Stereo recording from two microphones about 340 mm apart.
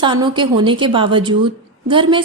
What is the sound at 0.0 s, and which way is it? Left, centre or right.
A woman's voice, centre.